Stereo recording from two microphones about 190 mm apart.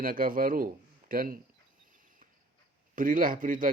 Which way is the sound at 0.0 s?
45° right (ahead or behind).